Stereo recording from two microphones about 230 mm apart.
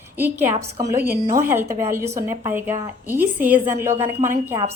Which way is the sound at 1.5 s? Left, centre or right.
Centre.